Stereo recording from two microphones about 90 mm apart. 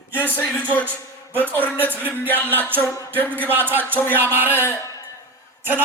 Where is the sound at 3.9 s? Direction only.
20° left (ahead or behind).